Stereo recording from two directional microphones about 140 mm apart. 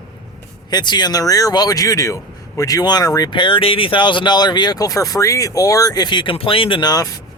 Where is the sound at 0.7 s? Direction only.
30° left (ahead or behind).